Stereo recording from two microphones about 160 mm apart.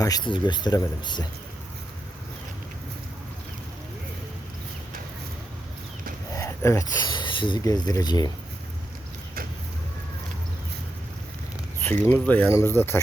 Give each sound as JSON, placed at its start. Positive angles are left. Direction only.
{"t": 0.0, "sound": "speech", "side_deg": 25}
{"t": 6.3, "sound": "speech", "side_deg": 20}
{"t": 11.8, "sound": "speech", "side_deg": 15}